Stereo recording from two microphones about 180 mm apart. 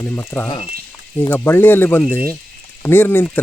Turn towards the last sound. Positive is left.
turn(degrees=10)  # may be behind; listen again after turning